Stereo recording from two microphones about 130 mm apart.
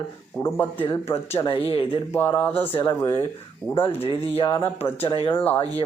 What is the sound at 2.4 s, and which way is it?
Speech, 15° left (ahead or behind).